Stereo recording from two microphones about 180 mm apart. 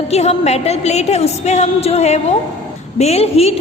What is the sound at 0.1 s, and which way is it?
A woman's voice, 35° left (ahead or behind).